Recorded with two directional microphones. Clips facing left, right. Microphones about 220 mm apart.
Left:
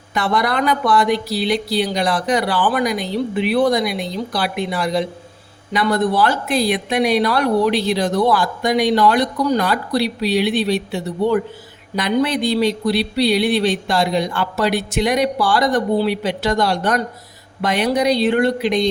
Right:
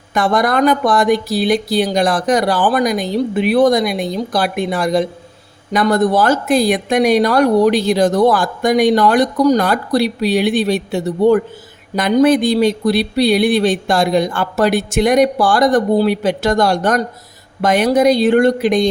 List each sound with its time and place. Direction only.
0.1 s speech: 45° right (ahead or behind)